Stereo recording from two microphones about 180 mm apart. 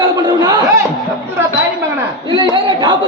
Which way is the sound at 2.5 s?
25° right (ahead or behind).